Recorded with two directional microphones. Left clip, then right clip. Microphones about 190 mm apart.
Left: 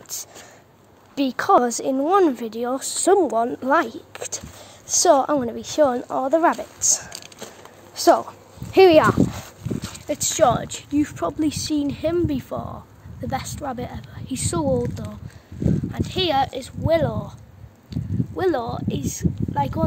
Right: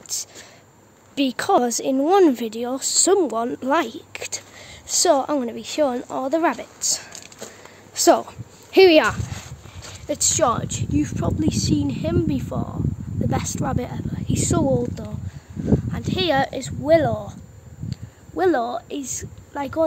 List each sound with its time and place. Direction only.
0.1 s a woman's voice: 5° right (ahead or behind)
1.1 s speech: 15° right (ahead or behind)
2.0 s a woman's voice: 30° right (ahead or behind)
2.5 s a woman's voice: 5° right (ahead or behind)
7.9 s a sound: 15° right (ahead or behind)
10.0 s a woman's voice: 5° right (ahead or behind)
13.3 s speech: 10° right (ahead or behind)